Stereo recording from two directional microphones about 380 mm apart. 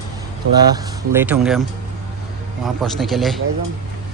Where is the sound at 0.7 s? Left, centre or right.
Centre.